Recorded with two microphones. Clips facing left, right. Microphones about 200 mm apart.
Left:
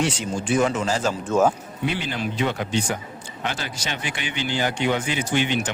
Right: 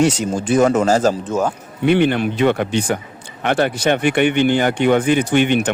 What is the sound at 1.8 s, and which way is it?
Speech, 60° right (ahead or behind).